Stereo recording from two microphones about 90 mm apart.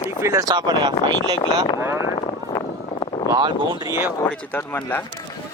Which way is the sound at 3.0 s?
60° left (ahead or behind).